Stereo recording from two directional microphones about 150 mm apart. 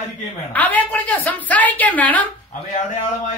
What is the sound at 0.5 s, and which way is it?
Speech, 10° left (ahead or behind).